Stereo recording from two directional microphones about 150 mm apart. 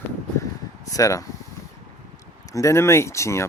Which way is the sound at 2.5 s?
20° left (ahead or behind).